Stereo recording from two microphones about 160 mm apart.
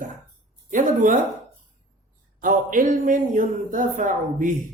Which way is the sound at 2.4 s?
55° right (ahead or behind).